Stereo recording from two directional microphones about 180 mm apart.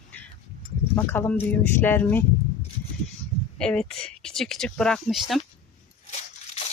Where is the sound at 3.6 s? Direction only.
5° left (ahead or behind).